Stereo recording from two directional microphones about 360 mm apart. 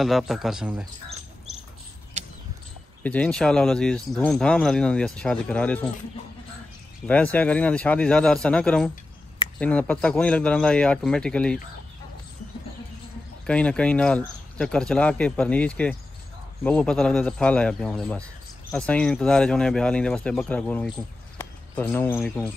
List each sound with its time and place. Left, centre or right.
0.0 s speech: centre
2.2 s a sound: centre
3.0 s speech: centre
7.1 s speech: centre
13.5 s speech: centre